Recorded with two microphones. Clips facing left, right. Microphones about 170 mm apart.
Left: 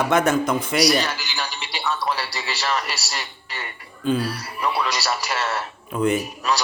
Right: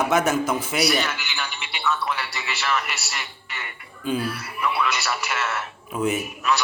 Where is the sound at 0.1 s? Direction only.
5° right (ahead or behind).